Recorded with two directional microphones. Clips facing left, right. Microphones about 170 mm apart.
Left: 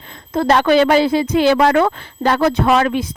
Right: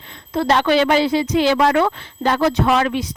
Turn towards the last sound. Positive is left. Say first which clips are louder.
# left 2 dB
turn(degrees=50)  # may be behind; listen again after turning